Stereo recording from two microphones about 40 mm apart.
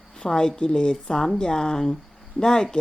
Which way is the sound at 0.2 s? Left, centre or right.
Centre.